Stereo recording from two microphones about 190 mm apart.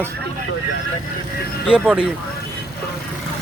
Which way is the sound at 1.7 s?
5° right (ahead or behind).